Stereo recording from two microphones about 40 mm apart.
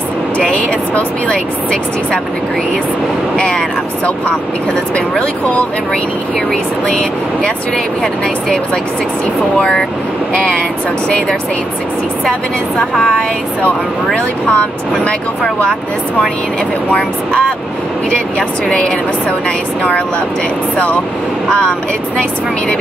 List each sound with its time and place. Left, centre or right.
3.3 s speech: centre
9.6 s speech: centre
10.3 s speech: left
14.5 s speech: left